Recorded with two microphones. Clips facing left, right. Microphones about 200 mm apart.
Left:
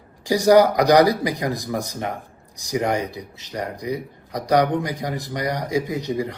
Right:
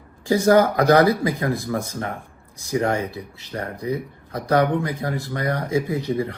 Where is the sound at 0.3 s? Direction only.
15° left (ahead or behind).